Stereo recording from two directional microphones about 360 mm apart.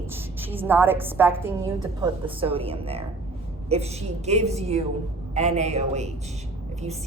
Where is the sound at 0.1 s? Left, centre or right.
Centre.